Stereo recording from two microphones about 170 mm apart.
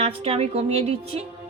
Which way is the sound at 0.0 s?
35° right (ahead or behind).